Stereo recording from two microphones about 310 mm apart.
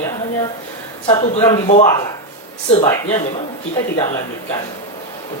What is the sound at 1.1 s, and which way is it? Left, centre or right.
Speech, centre.